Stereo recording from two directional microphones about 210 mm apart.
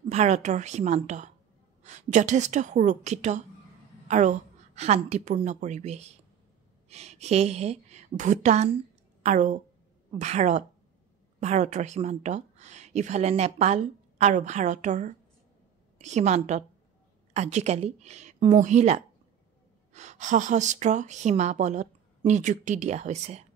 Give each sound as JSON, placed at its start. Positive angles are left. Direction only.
{"t": 0.1, "sound": "a woman's voice", "side_deg": -35}